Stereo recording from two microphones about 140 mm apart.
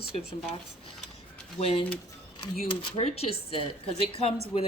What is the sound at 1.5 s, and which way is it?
Speech, 45° left (ahead or behind).